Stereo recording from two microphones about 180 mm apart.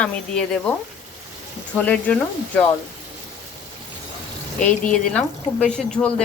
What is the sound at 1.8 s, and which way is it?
Speech, 10° left (ahead or behind).